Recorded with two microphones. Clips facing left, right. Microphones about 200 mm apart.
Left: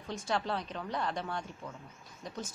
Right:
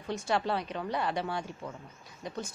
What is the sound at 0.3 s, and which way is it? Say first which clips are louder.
Speech: right 3 dB; centre (ahead or behind).